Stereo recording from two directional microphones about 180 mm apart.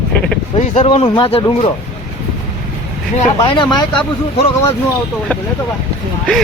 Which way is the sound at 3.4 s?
25° left (ahead or behind).